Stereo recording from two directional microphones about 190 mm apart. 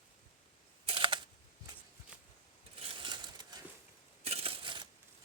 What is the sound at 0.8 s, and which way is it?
Camera, 25° right (ahead or behind).